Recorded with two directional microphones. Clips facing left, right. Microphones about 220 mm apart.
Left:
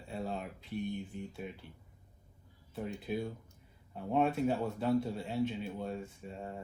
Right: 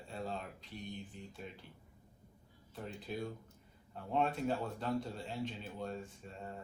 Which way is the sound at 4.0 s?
10° left (ahead or behind).